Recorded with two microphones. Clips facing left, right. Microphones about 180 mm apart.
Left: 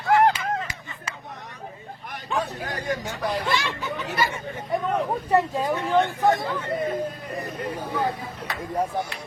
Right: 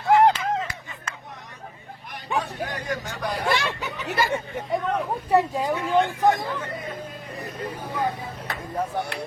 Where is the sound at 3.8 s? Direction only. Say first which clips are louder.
Left 2 dB; 15° right (ahead or behind).